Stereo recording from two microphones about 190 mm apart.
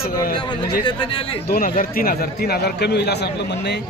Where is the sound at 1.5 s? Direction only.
50° left (ahead or behind).